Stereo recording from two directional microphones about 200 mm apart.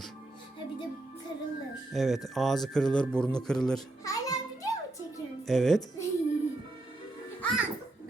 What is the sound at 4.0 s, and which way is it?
Music, 15° left (ahead or behind).